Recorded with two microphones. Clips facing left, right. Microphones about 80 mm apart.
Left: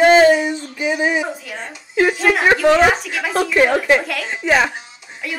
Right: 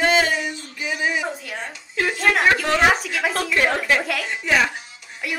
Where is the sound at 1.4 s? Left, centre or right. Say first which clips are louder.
Left 1 dB; centre.